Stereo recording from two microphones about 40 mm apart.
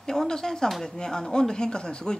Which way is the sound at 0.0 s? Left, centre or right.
Centre.